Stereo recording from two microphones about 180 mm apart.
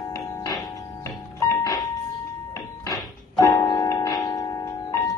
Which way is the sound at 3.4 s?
20° left (ahead or behind).